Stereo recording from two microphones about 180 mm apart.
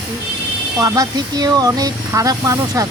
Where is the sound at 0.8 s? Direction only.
20° right (ahead or behind).